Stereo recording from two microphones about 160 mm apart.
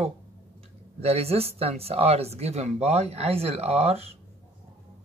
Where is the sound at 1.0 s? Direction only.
40° right (ahead or behind).